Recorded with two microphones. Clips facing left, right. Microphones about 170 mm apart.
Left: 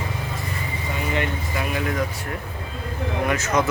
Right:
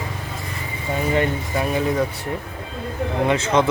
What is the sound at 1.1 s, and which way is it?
Speech, 30° right (ahead or behind).